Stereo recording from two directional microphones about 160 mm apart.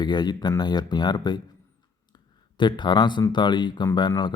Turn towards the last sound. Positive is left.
turn(degrees=25)  # may be behind; listen again after turning